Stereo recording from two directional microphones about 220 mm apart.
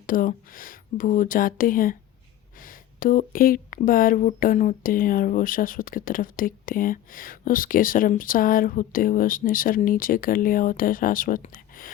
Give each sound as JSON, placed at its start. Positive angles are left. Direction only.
{"t": 0.0, "sound": "speech", "side_deg": 40}